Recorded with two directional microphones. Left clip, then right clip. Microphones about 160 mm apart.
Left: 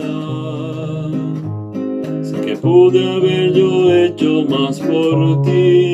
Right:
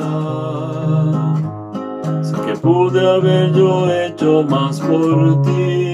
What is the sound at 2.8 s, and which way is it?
Music, 25° left (ahead or behind).